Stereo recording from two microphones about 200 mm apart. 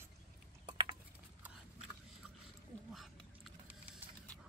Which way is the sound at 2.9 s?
Centre (ahead or behind).